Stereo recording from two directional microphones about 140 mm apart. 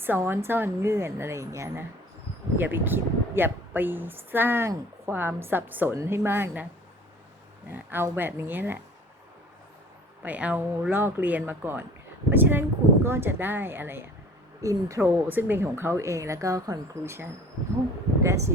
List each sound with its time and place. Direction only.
0.0 s speech: 15° right (ahead or behind)
7.7 s speech: 15° right (ahead or behind)
10.2 s speech: 10° right (ahead or behind)